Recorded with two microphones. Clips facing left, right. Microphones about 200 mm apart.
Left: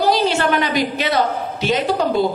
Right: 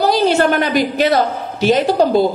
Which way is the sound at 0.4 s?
50° right (ahead or behind).